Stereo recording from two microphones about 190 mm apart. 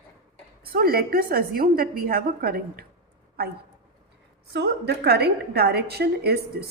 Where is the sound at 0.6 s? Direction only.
50° right (ahead or behind).